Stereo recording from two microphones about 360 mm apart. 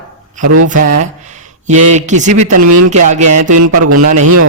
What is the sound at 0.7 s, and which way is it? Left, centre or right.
Speech, right.